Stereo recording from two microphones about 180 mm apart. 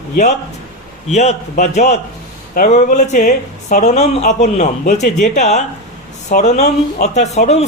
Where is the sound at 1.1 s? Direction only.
40° left (ahead or behind).